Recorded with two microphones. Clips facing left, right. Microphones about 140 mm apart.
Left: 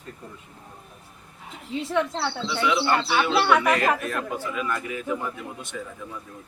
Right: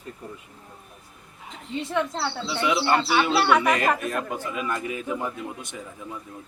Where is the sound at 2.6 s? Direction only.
20° right (ahead or behind).